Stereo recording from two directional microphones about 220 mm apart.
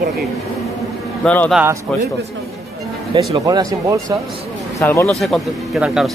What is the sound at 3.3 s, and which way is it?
Speech, 15° right (ahead or behind).